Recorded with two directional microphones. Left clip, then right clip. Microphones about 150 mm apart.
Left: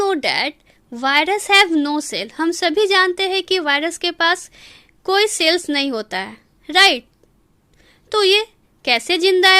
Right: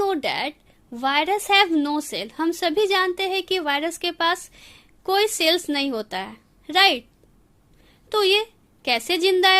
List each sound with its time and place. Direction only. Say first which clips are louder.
0.0 s a woman's voice: left 5 dB; 35° left (ahead or behind)